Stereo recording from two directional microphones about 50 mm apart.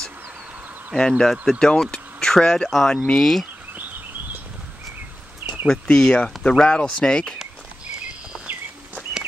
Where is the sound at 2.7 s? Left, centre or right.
Centre.